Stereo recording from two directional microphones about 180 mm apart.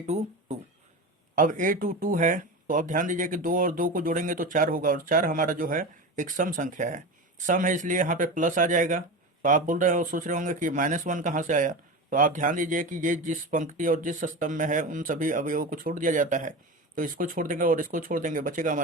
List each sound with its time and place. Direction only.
0.0 s speech: 40° right (ahead or behind)